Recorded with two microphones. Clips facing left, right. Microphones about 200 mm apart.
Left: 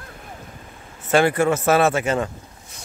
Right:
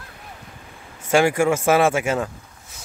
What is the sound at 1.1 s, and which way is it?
A man's voice, 10° right (ahead or behind).